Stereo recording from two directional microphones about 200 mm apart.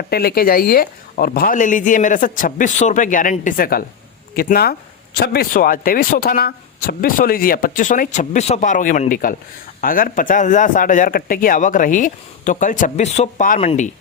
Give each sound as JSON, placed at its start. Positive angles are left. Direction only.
{"t": 0.1, "sound": "speech", "side_deg": 50}